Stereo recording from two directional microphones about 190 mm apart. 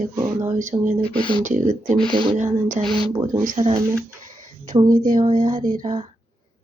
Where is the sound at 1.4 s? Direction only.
40° right (ahead or behind).